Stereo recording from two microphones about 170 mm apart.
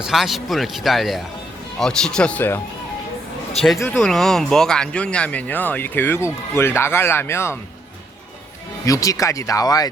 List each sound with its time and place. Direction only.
0.0 s a man's voice: centre (ahead or behind)
3.9 s speech: centre (ahead or behind)
8.9 s speech: 20° left (ahead or behind)